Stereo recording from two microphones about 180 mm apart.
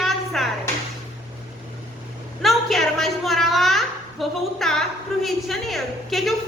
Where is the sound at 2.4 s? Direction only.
Centre (ahead or behind).